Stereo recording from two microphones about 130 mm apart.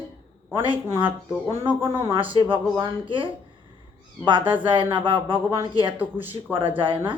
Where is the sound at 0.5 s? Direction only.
40° right (ahead or behind).